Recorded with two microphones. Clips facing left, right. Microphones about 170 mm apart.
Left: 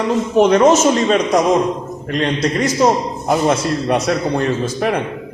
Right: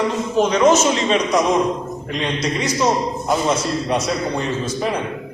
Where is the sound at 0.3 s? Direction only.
65° left (ahead or behind).